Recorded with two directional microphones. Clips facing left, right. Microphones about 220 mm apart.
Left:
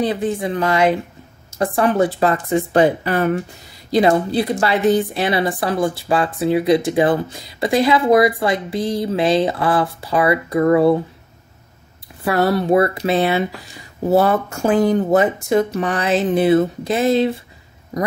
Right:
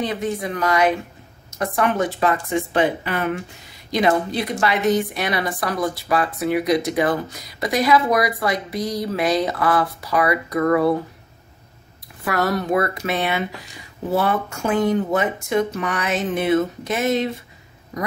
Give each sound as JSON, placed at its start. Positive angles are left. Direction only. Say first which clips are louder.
{"t": 0.0, "sound": "speech", "louder": "left 4 dB", "side_deg": 30}
{"t": 4.3, "sound": "speech", "louder": "left 4 dB", "side_deg": 30}
{"t": 12.3, "sound": "speech", "louder": "left 5 dB", "side_deg": 30}